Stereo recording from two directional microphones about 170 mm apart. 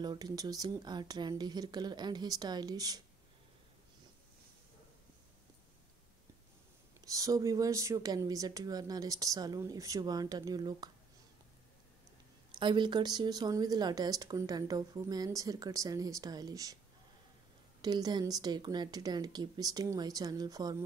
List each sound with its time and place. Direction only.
0.0 s speech: 25° right (ahead or behind)
7.1 s speech: 20° right (ahead or behind)
12.5 s speech: 30° right (ahead or behind)
17.8 s speech: 25° right (ahead or behind)